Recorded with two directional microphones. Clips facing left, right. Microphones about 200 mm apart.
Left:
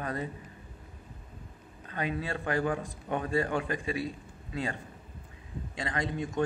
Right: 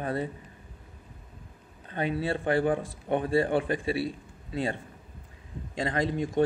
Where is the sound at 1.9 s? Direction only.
30° right (ahead or behind).